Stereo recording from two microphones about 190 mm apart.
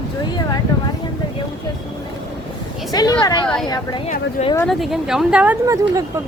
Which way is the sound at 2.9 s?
20° left (ahead or behind).